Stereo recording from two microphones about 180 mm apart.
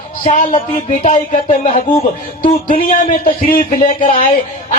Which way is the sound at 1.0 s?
45° left (ahead or behind).